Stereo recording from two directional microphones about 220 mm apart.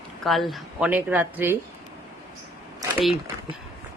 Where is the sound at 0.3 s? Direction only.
Centre (ahead or behind).